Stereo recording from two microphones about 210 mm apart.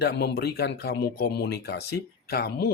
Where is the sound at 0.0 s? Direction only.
50° left (ahead or behind).